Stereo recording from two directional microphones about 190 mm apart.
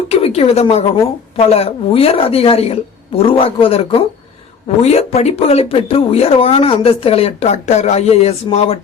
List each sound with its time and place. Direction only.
0.1 s a woman's voice: 30° left (ahead or behind)